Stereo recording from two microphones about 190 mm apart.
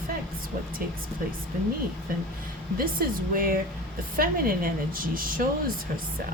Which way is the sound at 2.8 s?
50° right (ahead or behind).